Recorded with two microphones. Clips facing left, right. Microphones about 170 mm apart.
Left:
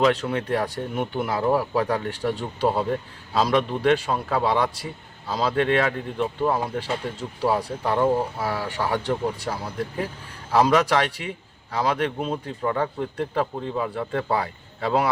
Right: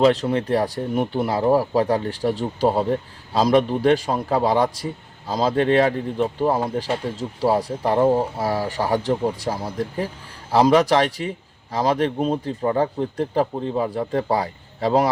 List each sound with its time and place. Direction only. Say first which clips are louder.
0.0 s speech: right 4 dB; 35° right (ahead or behind)